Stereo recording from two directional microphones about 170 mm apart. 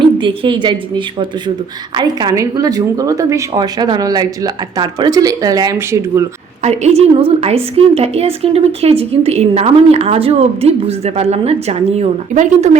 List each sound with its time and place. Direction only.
0.0 s speech: 30° right (ahead or behind)
6.6 s a woman's voice: 40° right (ahead or behind)